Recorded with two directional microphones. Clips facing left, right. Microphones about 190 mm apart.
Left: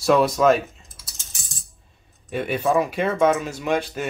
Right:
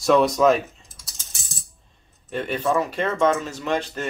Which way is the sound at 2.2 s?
10° left (ahead or behind).